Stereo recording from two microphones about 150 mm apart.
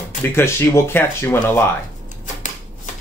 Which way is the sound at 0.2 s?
15° left (ahead or behind).